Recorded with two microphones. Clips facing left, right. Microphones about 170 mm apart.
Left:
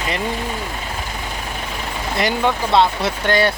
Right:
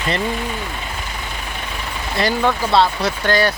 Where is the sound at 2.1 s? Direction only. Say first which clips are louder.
Right 1 dB; 20° left (ahead or behind).